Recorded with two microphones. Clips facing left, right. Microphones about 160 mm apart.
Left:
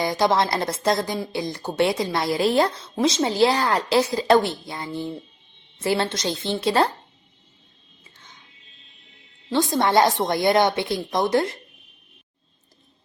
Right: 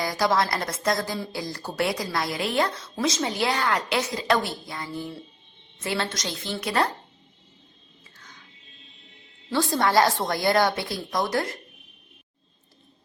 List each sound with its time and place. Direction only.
0.0 s speech: 25° left (ahead or behind)
9.5 s speech: 20° left (ahead or behind)